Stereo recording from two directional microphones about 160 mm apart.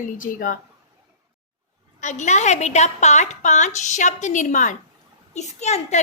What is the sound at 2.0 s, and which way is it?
A woman's voice, 50° left (ahead or behind).